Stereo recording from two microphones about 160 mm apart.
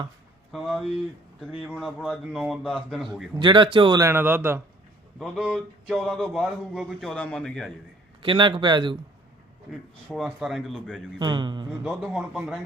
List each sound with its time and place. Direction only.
0.5 s speech: centre (ahead or behind)
3.3 s a man's voice: 30° right (ahead or behind); by 7.7 s 5° left (ahead or behind)
8.2 s speech: 30° right (ahead or behind)
10.1 s speech: centre (ahead or behind)
11.2 s a man's voice: 30° right (ahead or behind)
11.8 s speech: 5° right (ahead or behind)